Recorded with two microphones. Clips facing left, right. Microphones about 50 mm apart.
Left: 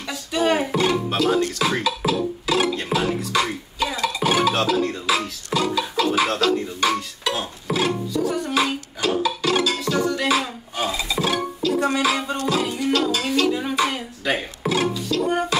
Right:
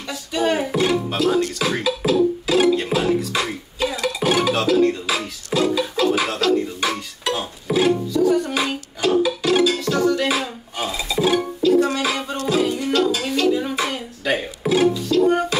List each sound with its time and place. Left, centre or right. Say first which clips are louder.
0.1 s speech: even; centre
0.7 s music: right 1 dB; centre